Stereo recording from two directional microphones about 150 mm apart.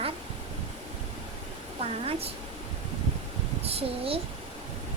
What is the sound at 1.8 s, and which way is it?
Speech, 40° right (ahead or behind).